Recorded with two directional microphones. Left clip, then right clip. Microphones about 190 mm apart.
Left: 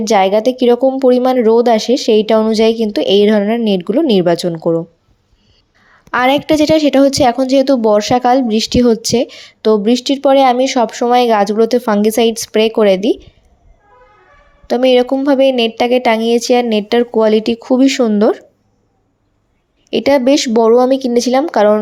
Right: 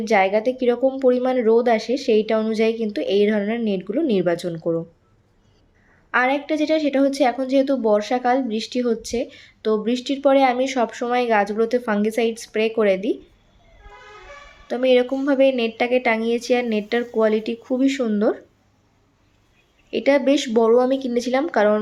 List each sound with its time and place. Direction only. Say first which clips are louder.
0.0 s a woman's voice: left 7 dB; 40° left (ahead or behind)
6.1 s a woman's voice: left 8 dB; 45° left (ahead or behind)
14.7 s a woman's voice: left 7 dB; 35° left (ahead or behind)
19.9 s a woman's voice: left 7 dB; 40° left (ahead or behind)